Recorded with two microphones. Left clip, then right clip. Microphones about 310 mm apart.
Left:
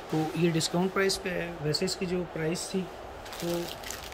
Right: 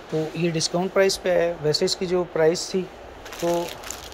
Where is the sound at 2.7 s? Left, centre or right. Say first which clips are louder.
Right 7 dB; right.